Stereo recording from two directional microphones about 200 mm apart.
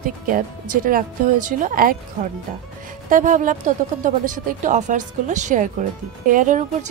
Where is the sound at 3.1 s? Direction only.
40° right (ahead or behind).